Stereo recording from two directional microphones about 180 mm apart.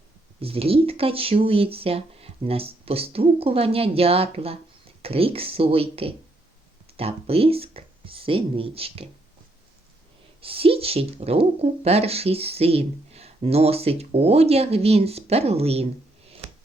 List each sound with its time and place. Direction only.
0.3 s speech: 30° right (ahead or behind)
10.4 s speech: 30° right (ahead or behind)